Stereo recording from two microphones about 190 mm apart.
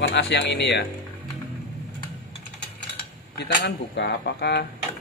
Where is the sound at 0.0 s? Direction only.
60° left (ahead or behind).